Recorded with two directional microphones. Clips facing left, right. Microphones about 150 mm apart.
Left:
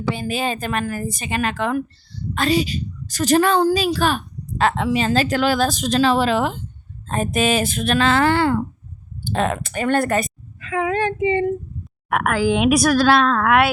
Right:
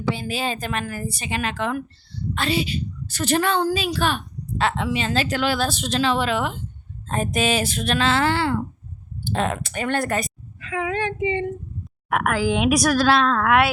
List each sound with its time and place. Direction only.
0.1 s a woman's voice: 50° left (ahead or behind); by 6.6 s 35° left (ahead or behind)
7.1 s a woman's voice: 50° left (ahead or behind)
12.0 s a woman's voice: 60° left (ahead or behind)